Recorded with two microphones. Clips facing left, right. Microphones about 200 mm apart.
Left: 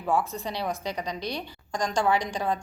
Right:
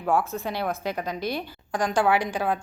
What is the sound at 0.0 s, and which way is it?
A woman's voice, centre (ahead or behind).